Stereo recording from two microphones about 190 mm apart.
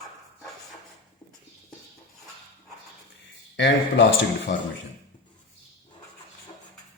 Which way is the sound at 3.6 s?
70° left (ahead or behind).